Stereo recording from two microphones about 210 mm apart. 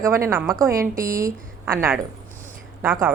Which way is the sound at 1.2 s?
15° right (ahead or behind).